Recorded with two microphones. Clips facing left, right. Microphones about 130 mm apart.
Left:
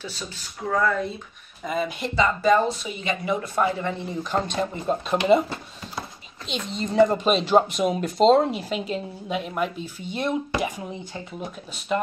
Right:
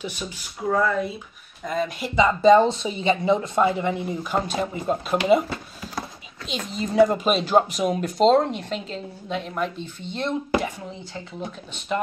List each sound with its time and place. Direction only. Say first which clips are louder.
0.0 s speech: right 3 dB; 15° right (ahead or behind)
0.7 s speech: right 1 dB; 5° right (ahead or behind)
1.6 s speech: even; 5° left (ahead or behind)
2.1 s speech: right 5 dB; 20° right (ahead or behind); by 5.1 s 5° right (ahead or behind)
6.4 s speech: even; centre (ahead or behind); by 11.0 s 15° left (ahead or behind)
11.9 s speech: left 1 dB; centre (ahead or behind)